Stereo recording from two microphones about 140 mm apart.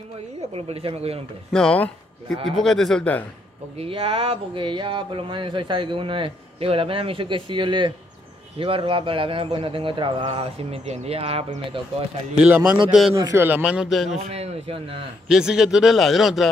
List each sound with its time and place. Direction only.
0.7 s speech: 45° right (ahead or behind)
1.5 s speech: 5° left (ahead or behind)
3.7 s speech: 45° right (ahead or behind)
12.4 s a man's voice: 10° right (ahead or behind)
14.3 s speech: 50° right (ahead or behind)
15.2 s speech: 5° right (ahead or behind)